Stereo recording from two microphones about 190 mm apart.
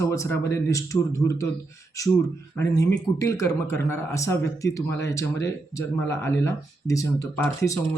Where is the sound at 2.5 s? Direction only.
20° left (ahead or behind).